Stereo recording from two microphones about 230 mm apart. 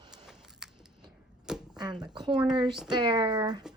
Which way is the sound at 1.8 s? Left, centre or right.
Centre.